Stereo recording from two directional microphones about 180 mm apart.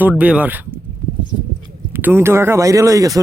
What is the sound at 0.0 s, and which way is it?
Speech, 5° right (ahead or behind).